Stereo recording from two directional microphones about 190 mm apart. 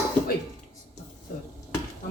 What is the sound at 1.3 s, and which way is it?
Speech, 50° left (ahead or behind).